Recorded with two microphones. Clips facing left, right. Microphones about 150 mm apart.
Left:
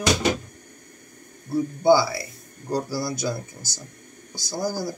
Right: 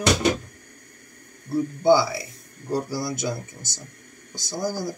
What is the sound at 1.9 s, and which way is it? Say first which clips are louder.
Speech: even; 20° right (ahead or behind).